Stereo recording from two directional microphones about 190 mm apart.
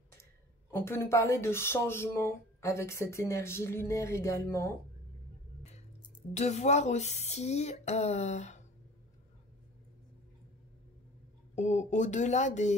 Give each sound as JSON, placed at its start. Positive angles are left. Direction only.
{"t": 0.2, "sound": "speech", "side_deg": 15}
{"t": 6.3, "sound": "speech", "side_deg": 35}
{"t": 11.5, "sound": "speech", "side_deg": 40}